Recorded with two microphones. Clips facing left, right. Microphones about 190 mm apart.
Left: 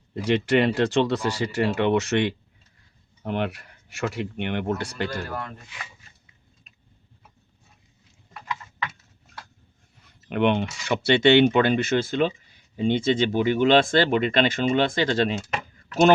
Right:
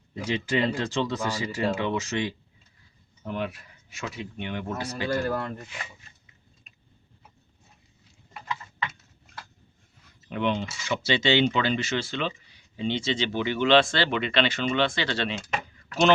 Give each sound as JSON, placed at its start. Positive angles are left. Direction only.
{"t": 0.1, "sound": "speech", "side_deg": 65}
{"t": 10.2, "sound": "speech", "side_deg": 65}